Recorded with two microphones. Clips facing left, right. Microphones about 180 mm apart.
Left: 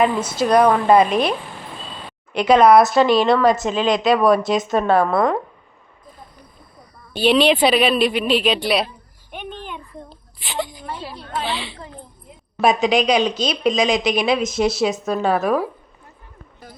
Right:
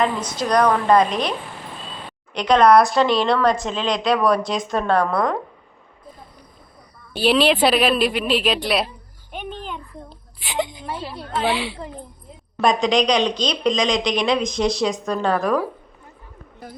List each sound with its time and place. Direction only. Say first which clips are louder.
0.0 s speech: left 4 dB; 5° left (ahead or behind)
2.3 s speech: left 2 dB; 5° left (ahead or behind)
7.1 s speech: left 2 dB; centre (ahead or behind)
10.4 s a woman's voice: right 2 dB; 15° right (ahead or behind)
11.5 s speech: right 3 dB; 10° right (ahead or behind)
12.6 s speech: left 1 dB; 5° left (ahead or behind)